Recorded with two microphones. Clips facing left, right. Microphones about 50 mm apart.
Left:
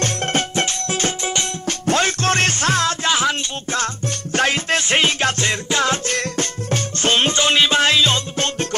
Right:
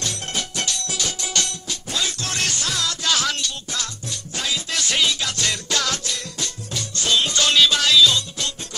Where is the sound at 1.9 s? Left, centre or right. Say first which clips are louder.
Left 10 dB; left.